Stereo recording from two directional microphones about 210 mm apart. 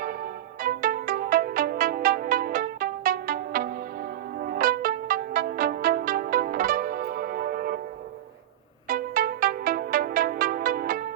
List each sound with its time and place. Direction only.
0.0 s music: 45° right (ahead or behind)
8.9 s music: 40° right (ahead or behind)